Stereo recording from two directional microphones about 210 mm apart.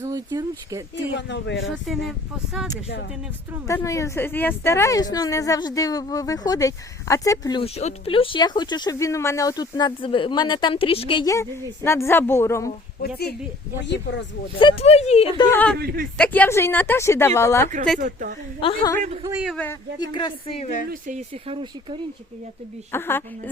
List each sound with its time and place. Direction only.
0.0 s speech: 15° right (ahead or behind)
0.9 s speech: 55° left (ahead or behind)
1.9 s speech: centre (ahead or behind)
3.7 s speech: 15° left (ahead or behind)
13.8 s speech: 55° left (ahead or behind)
14.6 s speech: 25° left (ahead or behind)
15.5 s speech: 5° left (ahead or behind)
15.8 s a man's voice: 45° right (ahead or behind)
16.1 s speech: 5° left (ahead or behind)
18.0 s a woman's voice: 40° right (ahead or behind)
18.6 s speech: 25° left (ahead or behind)
20.0 s speech: 25° left (ahead or behind)
20.9 s speech: 35° right (ahead or behind)
22.9 s speech: 10° left (ahead or behind)